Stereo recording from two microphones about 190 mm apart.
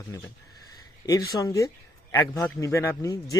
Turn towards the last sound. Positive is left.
turn(degrees=20)  # may be behind; listen again after turning